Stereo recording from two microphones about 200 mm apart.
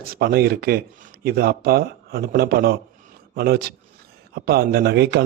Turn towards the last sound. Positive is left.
turn(degrees=-55)  # may be behind; listen again after turning